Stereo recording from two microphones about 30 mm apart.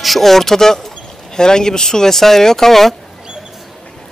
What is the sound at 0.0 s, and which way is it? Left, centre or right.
Speech, centre.